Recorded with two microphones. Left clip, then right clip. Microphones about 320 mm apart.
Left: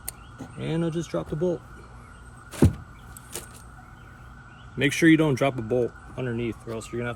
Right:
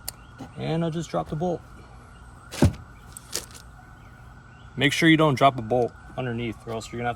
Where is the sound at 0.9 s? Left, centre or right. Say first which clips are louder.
Right 1 dB; centre.